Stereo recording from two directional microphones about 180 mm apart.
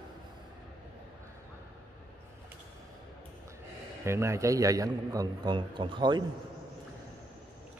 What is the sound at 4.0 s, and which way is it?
A man's voice, 15° right (ahead or behind).